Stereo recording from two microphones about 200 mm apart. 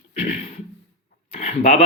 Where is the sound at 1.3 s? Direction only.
35° left (ahead or behind).